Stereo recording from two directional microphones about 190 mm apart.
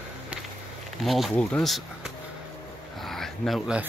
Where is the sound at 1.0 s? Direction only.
Centre (ahead or behind).